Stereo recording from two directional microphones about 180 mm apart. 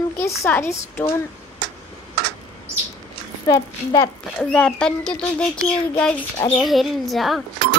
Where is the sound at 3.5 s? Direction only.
20° left (ahead or behind).